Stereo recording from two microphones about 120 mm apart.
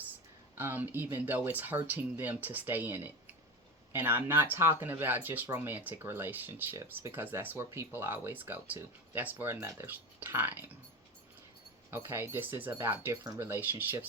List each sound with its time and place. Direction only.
0.5 s speech: 15° right (ahead or behind)
11.9 s speech: 20° right (ahead or behind)